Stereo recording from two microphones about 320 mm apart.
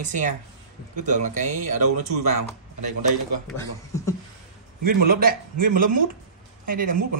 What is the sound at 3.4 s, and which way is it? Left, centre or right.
Speech, centre.